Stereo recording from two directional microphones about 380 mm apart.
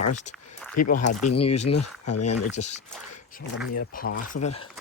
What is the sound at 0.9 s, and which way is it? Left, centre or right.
Speech, left.